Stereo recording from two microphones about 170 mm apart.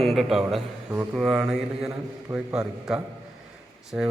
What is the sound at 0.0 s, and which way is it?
A man's voice, centre (ahead or behind).